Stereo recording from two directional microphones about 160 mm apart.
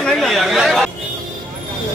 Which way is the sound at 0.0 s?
Centre (ahead or behind).